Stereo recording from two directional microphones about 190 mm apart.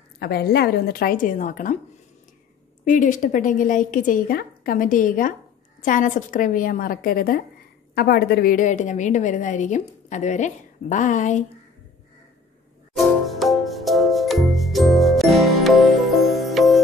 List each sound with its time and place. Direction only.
0.2 s a woman's voice: 55° left (ahead or behind)
2.8 s a woman's voice: 45° left (ahead or behind)
12.9 s music: centre (ahead or behind)